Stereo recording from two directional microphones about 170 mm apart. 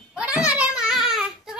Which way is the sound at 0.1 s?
5° right (ahead or behind).